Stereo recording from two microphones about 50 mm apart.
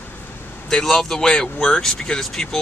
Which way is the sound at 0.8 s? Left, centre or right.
Centre.